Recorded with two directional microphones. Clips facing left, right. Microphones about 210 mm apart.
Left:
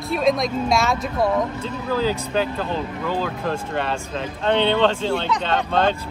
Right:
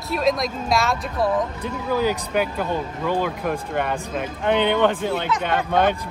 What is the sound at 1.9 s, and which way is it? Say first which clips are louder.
Speech: even; 15° right (ahead or behind).